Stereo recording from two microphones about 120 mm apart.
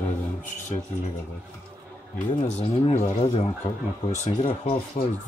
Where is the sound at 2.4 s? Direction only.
60° left (ahead or behind).